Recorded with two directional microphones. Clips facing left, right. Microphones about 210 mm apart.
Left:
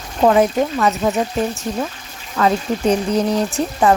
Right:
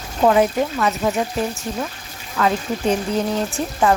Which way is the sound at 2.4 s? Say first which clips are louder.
Left 3 dB; 35° left (ahead or behind).